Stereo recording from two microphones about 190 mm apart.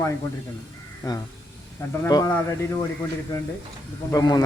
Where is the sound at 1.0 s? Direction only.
20° left (ahead or behind).